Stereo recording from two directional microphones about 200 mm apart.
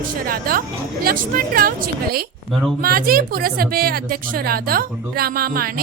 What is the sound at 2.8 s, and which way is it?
Speech, 50° right (ahead or behind).